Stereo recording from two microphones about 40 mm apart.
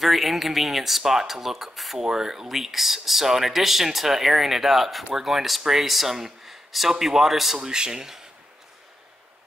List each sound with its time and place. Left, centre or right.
0.0 s speech: centre
7.6 s speech: centre